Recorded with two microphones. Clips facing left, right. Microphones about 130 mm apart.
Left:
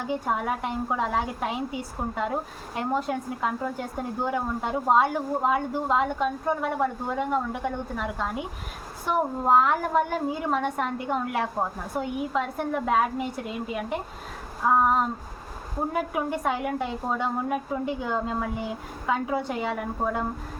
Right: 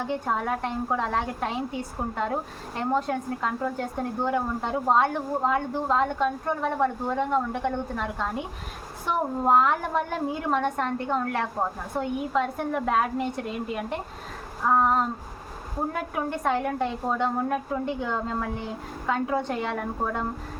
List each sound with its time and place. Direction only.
0.1 s a woman's voice: 5° left (ahead or behind)
14.8 s a sound: 5° left (ahead or behind)
15.9 s a woman's voice: 5° left (ahead or behind)